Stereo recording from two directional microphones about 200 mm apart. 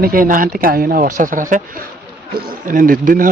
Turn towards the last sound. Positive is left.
turn(degrees=-45)  # may be behind; listen again after turning